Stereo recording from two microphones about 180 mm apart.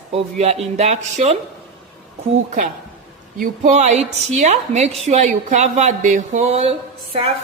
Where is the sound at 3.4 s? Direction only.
45° right (ahead or behind).